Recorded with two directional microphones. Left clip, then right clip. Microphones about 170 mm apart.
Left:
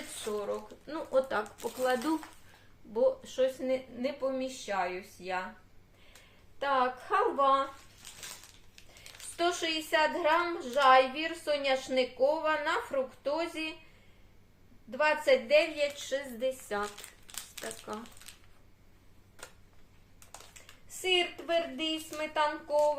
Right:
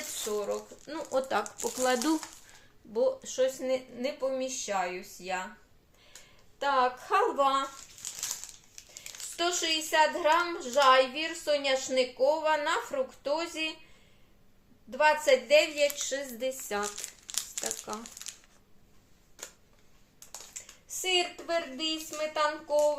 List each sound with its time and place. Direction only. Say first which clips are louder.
0.3 s speech: right 2 dB; centre (ahead or behind)
1.1 s speech: even; 25° right (ahead or behind)
2.9 s a woman's voice: even; 10° right (ahead or behind)
6.6 s a woman's voice: right 2 dB; 10° right (ahead or behind)
8.0 s crushing: right 9 dB; 35° right (ahead or behind)
9.4 s a woman's voice: right 1 dB; 10° right (ahead or behind)
14.8 s a woman's voice: right 3 dB; 10° right (ahead or behind)
17.3 s crumpling: right 6 dB; 10° right (ahead or behind)
21.0 s speech: even; 5° right (ahead or behind)